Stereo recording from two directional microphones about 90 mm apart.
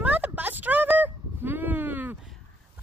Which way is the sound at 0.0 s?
20° right (ahead or behind).